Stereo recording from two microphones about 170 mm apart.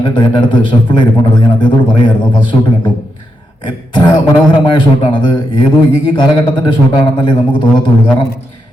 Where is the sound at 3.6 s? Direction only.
25° left (ahead or behind).